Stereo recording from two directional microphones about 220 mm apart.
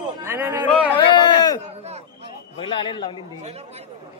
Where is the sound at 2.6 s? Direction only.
20° left (ahead or behind).